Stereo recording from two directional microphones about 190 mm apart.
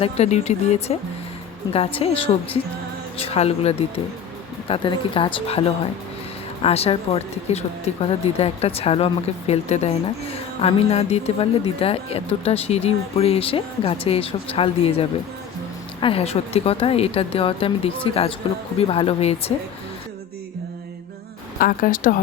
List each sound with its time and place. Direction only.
0.0 s speech: 35° left (ahead or behind)
2.0 s speech: 30° left (ahead or behind)
21.6 s speech: 45° left (ahead or behind)